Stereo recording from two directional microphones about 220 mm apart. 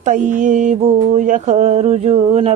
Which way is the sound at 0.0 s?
35° right (ahead or behind).